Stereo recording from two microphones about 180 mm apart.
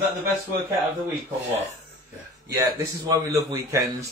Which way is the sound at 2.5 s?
20° right (ahead or behind).